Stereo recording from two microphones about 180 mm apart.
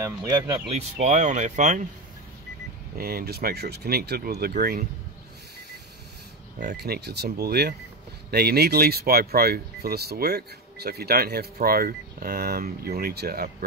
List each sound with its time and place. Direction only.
0.0 s speech: 20° right (ahead or behind)
0.7 s speech: 40° right (ahead or behind)
3.0 s speech: 55° right (ahead or behind)
6.8 s speech: 65° right (ahead or behind)